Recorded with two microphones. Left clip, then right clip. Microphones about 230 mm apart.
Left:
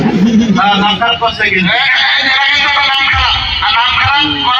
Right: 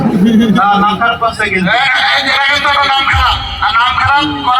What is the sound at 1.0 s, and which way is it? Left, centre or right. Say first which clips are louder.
Speech: left 1 dB; centre.